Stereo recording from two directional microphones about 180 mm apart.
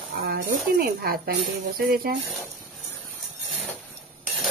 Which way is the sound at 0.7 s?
55° right (ahead or behind).